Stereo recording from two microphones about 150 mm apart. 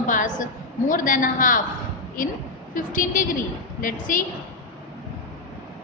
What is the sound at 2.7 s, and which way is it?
A woman's voice, 65° left (ahead or behind).